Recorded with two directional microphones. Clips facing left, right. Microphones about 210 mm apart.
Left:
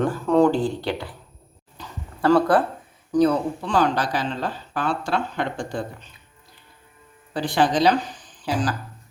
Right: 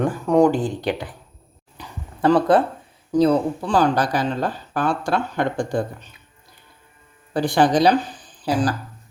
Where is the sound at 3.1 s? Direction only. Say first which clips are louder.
Right 2 dB; 30° right (ahead or behind); by 6.0 s 50° right (ahead or behind).